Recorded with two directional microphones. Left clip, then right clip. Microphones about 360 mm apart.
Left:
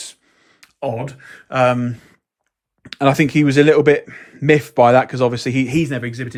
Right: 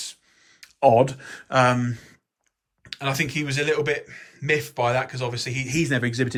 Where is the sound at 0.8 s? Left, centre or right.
Centre.